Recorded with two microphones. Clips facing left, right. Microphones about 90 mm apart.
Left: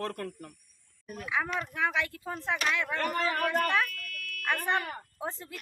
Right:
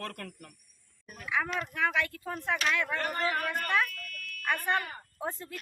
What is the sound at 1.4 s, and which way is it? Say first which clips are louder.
Speech: even; 5° left (ahead or behind).